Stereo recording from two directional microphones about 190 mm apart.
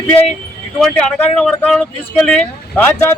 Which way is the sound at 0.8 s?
5° left (ahead or behind).